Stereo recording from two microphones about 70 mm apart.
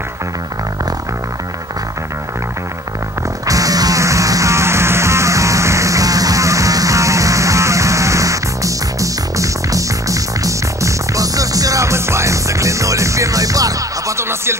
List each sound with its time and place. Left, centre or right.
3.4 s music: right